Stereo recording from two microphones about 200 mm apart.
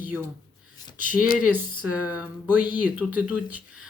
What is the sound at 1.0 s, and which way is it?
Speech, 45° left (ahead or behind).